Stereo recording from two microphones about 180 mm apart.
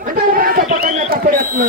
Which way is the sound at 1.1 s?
55° right (ahead or behind).